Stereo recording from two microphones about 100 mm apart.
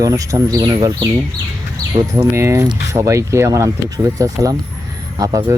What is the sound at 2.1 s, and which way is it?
A woman's voice, 30° right (ahead or behind).